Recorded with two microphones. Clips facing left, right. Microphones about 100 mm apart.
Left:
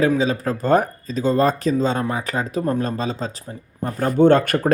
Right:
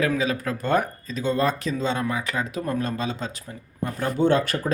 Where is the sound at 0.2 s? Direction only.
30° left (ahead or behind).